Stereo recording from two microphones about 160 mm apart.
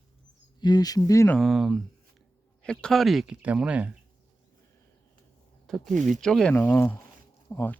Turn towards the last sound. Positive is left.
turn(degrees=15)  # may be behind; listen again after turning